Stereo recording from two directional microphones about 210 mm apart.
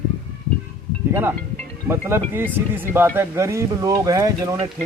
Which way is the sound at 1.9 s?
10° right (ahead or behind).